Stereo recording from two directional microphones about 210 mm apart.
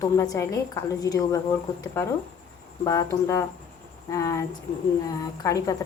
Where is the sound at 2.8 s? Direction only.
15° left (ahead or behind).